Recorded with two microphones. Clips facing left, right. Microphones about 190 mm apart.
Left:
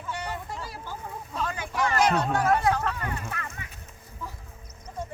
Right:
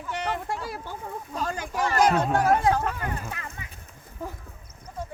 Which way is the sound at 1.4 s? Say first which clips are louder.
Right 1 dB; 45° right (ahead or behind).